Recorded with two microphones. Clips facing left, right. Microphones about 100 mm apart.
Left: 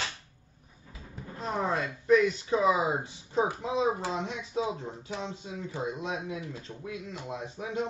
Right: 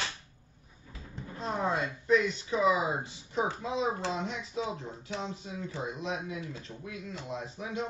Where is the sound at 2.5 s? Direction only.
30° left (ahead or behind).